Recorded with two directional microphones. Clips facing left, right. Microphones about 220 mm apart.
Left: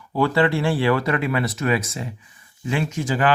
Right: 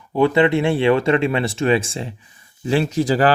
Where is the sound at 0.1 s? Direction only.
20° right (ahead or behind).